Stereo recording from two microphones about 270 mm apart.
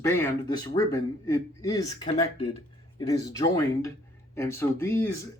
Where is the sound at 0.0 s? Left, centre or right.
Centre.